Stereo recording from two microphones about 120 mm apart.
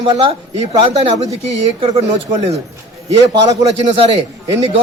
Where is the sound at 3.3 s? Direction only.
35° right (ahead or behind).